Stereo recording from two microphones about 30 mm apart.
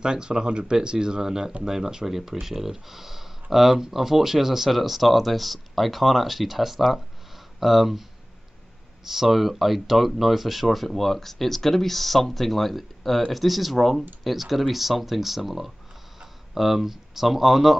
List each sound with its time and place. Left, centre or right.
0.0 s speech: right; by 17.7 s centre